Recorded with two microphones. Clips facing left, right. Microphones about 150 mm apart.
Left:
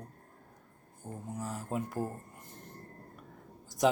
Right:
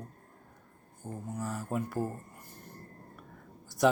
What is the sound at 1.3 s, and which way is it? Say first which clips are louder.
Speech: right 2 dB; 20° left (ahead or behind).